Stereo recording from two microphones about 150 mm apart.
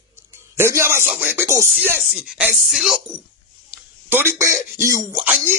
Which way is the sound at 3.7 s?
15° right (ahead or behind).